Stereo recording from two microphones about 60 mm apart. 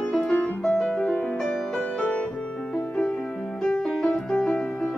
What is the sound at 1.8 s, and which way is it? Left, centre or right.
Music, centre.